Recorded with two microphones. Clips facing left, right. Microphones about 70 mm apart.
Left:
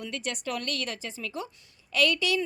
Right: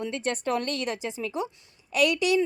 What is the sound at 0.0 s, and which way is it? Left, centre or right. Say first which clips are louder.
A woman's voice: right 5 dB; right.